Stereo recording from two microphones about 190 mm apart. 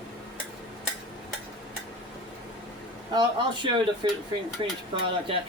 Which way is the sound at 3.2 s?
25° right (ahead or behind).